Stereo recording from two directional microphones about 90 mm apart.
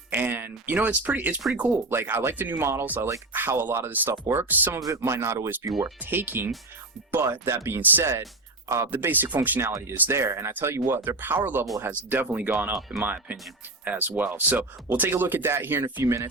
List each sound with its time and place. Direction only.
0.1 s speech: 20° right (ahead or behind)
8.9 s speech: 20° right (ahead or behind)